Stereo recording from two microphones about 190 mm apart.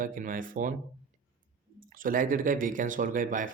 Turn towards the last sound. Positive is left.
turn(degrees=-45)  # may be behind; listen again after turning